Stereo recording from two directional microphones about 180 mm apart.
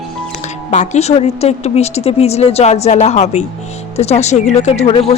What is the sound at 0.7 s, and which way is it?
Speech, 40° left (ahead or behind).